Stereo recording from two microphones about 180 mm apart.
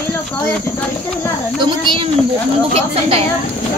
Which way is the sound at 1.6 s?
25° right (ahead or behind).